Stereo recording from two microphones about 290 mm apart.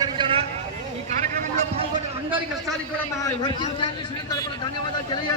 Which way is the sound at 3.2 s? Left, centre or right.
Centre.